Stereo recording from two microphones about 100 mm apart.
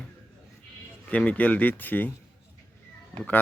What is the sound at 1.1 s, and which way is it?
Speech, 15° left (ahead or behind).